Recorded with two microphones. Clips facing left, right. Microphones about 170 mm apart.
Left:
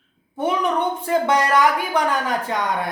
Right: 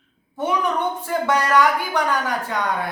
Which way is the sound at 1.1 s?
20° left (ahead or behind).